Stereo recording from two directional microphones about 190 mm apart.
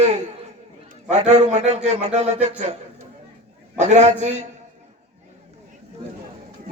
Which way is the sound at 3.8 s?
35° right (ahead or behind).